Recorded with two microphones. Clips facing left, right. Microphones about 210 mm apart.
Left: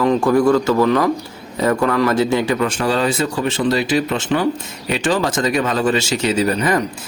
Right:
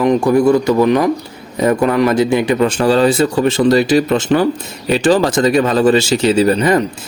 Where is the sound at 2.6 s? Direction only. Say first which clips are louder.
Right 6 dB; 30° right (ahead or behind).